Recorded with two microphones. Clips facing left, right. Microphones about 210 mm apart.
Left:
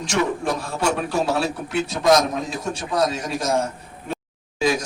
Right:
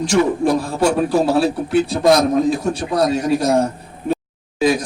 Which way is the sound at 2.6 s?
35° right (ahead or behind).